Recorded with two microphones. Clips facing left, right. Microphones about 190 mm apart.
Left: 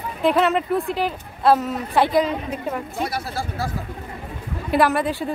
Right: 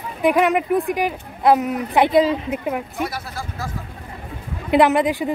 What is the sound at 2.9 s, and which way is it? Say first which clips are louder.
Speech: left 1 dB; 30° left (ahead or behind).